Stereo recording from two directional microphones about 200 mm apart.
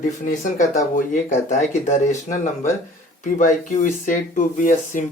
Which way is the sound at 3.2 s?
40° left (ahead or behind).